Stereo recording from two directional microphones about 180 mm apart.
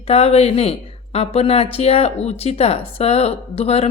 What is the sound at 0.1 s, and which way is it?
Speech, 35° left (ahead or behind).